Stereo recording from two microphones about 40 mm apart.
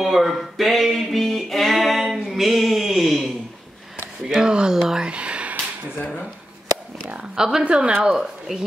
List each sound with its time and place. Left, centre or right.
0.0 s speech: centre
0.9 s music: centre
4.3 s a sound: centre
4.7 s whispering: centre
5.0 s a sound: right
7.3 s speech: centre
7.6 s speech: right
8.1 s speech: centre